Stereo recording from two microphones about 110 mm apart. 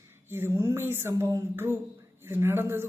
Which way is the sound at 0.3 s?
20° right (ahead or behind).